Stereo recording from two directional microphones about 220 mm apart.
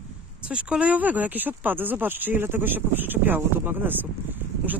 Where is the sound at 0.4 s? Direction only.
5° right (ahead or behind).